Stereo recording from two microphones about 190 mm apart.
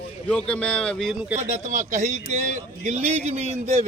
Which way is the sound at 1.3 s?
40° right (ahead or behind).